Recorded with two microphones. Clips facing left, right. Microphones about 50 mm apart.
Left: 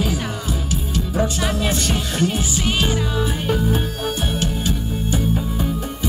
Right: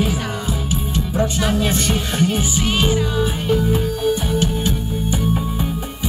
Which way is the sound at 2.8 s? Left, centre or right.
Centre.